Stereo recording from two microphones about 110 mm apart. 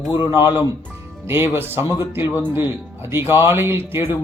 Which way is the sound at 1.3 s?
20° right (ahead or behind).